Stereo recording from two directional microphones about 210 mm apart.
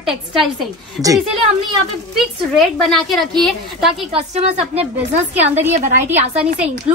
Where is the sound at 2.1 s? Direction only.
Centre (ahead or behind).